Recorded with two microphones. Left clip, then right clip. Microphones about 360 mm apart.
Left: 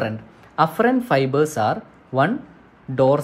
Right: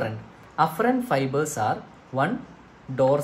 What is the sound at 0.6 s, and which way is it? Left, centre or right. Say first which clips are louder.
Speech: left 4 dB; left.